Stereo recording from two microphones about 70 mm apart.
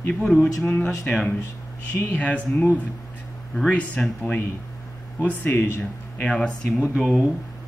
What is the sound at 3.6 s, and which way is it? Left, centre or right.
Speech, centre.